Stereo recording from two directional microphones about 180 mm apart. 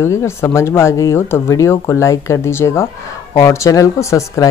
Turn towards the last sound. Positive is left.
turn(degrees=15)  # may be behind; listen again after turning